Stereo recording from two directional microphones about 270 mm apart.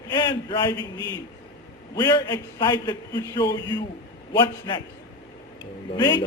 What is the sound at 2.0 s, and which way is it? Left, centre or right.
A man's voice, centre.